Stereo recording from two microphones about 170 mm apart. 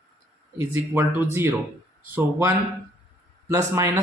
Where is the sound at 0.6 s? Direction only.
10° right (ahead or behind).